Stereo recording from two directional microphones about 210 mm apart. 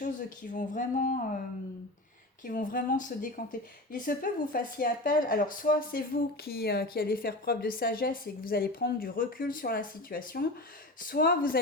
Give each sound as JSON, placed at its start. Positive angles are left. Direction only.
{"t": 0.0, "sound": "speech", "side_deg": 40}
{"t": 2.4, "sound": "speech", "side_deg": 40}